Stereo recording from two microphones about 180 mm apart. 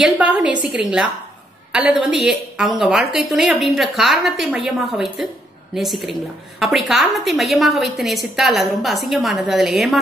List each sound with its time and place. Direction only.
0.0 s a woman's voice: 5° right (ahead or behind)